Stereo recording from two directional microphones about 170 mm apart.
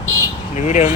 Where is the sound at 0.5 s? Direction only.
45° left (ahead or behind).